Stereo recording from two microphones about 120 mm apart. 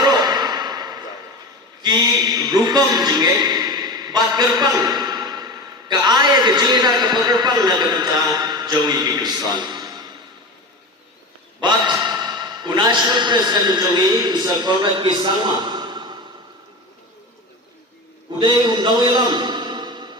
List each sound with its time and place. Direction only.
0.0 s a sound: 35° right (ahead or behind)
1.8 s a man's voice: 35° right (ahead or behind)
11.6 s a man's voice: 35° right (ahead or behind)
18.3 s a man's voice: 40° right (ahead or behind)